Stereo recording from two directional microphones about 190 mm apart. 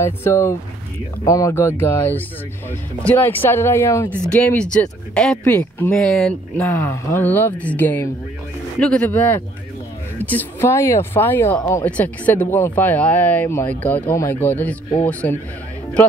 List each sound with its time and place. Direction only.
0.0 s speech: 15° left (ahead or behind)